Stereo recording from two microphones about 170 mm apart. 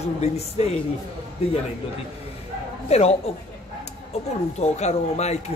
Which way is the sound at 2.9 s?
40° left (ahead or behind).